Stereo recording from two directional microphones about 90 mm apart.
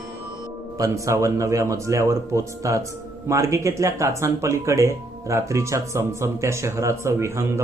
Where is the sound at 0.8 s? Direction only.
35° right (ahead or behind).